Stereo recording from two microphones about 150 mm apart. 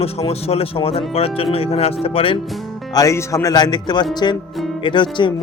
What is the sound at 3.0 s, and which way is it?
Speech, 20° left (ahead or behind).